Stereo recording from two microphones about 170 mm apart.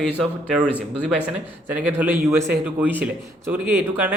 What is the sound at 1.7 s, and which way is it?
Speech, 10° right (ahead or behind).